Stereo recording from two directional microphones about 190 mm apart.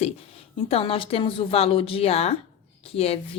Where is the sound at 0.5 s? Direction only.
30° left (ahead or behind).